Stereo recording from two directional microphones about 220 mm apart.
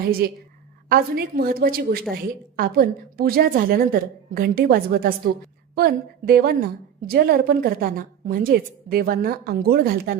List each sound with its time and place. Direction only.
0.2 s a woman's voice: 45° right (ahead or behind)